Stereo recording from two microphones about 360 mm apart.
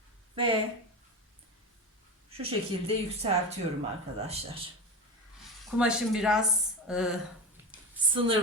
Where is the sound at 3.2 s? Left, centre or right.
Centre.